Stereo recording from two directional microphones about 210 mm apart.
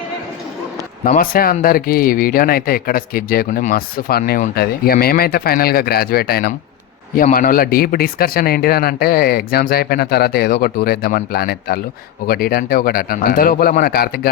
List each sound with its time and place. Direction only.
1.0 s speech: 40° left (ahead or behind)